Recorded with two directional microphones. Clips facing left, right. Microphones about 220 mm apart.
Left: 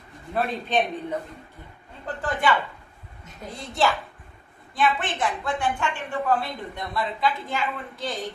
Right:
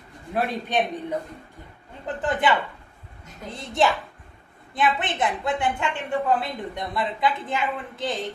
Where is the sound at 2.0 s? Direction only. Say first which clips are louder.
Right 2 dB; 20° right (ahead or behind).